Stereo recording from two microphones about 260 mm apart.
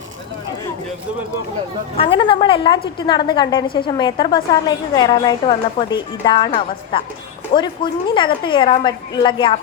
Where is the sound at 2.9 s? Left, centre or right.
Centre.